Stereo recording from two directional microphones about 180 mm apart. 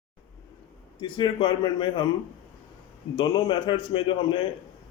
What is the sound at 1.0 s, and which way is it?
Speech, 25° left (ahead or behind).